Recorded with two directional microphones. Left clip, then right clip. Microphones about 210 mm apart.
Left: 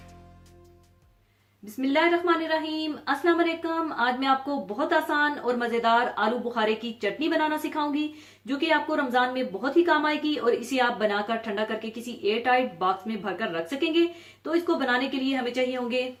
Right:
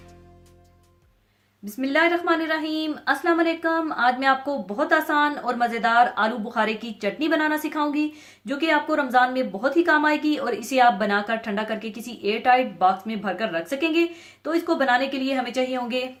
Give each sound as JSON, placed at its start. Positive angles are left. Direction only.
{"t": 1.8, "sound": "a woman's voice", "side_deg": -45}